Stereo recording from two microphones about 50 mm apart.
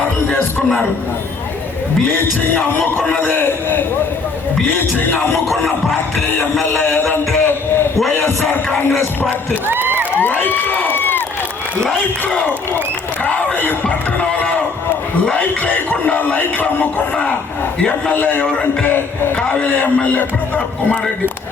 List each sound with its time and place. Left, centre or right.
3.2 s a man's voice: left
5.5 s music: centre
7.1 s a sound: left
9.6 s a sound: right
10.2 s speech: left
13.8 s music: left
15.6 s speech: left
18.1 s speech: left
18.9 s music: left
19.4 s speech: left